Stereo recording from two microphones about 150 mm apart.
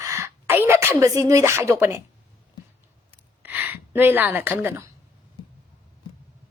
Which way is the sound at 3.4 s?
10° right (ahead or behind).